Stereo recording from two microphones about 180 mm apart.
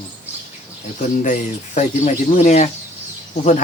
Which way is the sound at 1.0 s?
45° left (ahead or behind).